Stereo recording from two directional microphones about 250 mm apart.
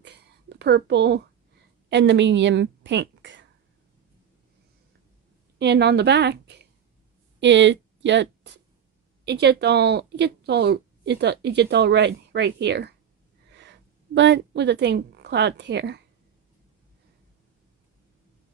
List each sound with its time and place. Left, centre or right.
0.0 s a sound: right
1.9 s a woman's voice: right
5.6 s a woman's voice: right